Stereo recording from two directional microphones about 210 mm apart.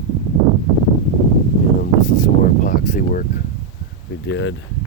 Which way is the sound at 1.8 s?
40° left (ahead or behind).